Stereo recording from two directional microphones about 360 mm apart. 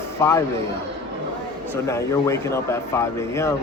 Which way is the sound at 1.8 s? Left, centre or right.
Centre.